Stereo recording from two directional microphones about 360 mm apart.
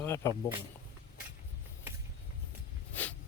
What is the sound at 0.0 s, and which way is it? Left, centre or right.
Speech, centre.